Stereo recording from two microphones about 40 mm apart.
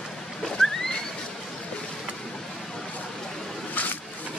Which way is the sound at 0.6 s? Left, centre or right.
Centre.